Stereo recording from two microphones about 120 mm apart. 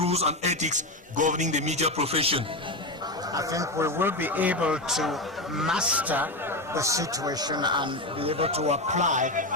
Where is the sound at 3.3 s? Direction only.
30° right (ahead or behind).